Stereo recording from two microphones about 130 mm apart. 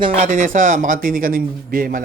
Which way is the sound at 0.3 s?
75° right (ahead or behind).